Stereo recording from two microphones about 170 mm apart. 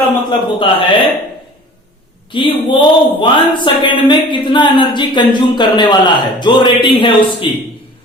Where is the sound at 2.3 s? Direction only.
30° left (ahead or behind).